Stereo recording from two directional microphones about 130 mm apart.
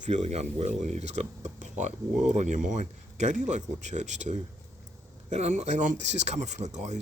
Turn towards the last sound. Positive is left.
turn(degrees=-65)  # may be behind; listen again after turning